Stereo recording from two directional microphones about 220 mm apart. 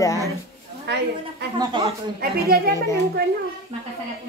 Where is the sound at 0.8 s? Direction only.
50° right (ahead or behind).